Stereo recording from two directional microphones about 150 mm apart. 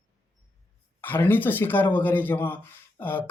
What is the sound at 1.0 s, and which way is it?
Speech, 15° left (ahead or behind).